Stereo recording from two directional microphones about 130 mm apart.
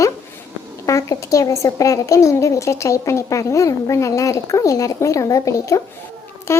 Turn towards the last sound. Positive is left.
turn(degrees=20)  # may be behind; listen again after turning